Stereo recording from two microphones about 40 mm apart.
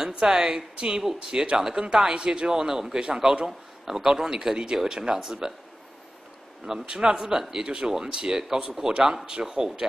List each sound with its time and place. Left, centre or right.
0.0 s a man's voice: centre
6.6 s a man's voice: right